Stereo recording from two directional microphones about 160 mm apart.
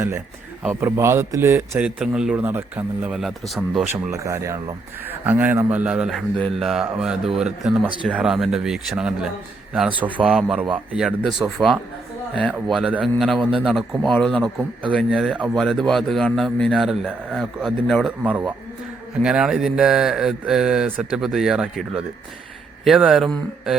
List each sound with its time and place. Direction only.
0.7 s a man's voice: 15° right (ahead or behind)
4.1 s a man's voice: 20° right (ahead or behind); by 23.7 s centre (ahead or behind)